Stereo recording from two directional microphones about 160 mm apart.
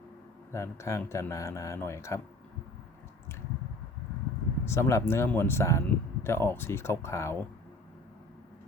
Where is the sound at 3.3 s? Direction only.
15° left (ahead or behind).